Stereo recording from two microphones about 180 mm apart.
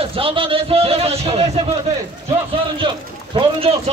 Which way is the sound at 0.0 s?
30° right (ahead or behind).